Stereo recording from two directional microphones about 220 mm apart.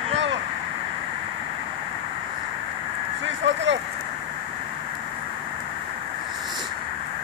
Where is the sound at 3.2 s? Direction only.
55° right (ahead or behind).